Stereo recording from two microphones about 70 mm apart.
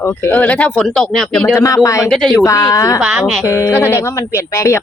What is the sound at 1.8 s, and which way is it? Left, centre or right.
Speech, left.